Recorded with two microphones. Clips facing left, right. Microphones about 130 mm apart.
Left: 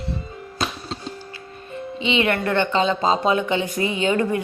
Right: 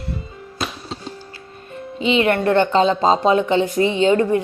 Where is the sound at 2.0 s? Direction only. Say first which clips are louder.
Right 4 dB; 45° right (ahead or behind).